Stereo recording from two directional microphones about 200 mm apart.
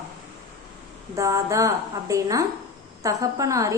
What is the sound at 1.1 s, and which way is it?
A woman's voice, 15° right (ahead or behind).